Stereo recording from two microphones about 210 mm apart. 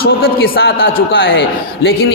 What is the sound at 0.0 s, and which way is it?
A man's voice, 45° left (ahead or behind).